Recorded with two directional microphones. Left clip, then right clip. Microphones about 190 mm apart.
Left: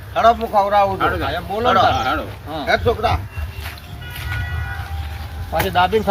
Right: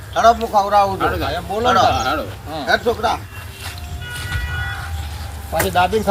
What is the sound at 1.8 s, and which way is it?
Speech, 10° right (ahead or behind).